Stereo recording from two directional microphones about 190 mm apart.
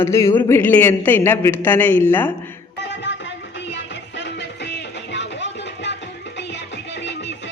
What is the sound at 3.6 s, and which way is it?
Music, 70° left (ahead or behind).